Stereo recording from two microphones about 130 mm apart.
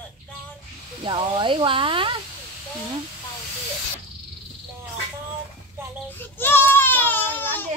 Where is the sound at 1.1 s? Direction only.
40° right (ahead or behind).